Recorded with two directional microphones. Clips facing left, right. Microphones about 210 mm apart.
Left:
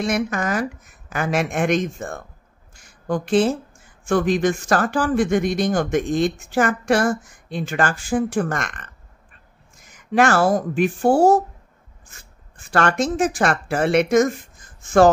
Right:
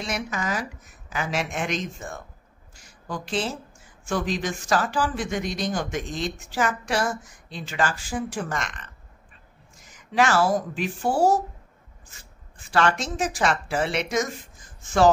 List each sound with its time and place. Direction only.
0.0 s speech: 50° left (ahead or behind)
2.7 s a sound: 55° left (ahead or behind)
4.0 s speech: 55° left (ahead or behind)
12.5 s speech: 50° left (ahead or behind)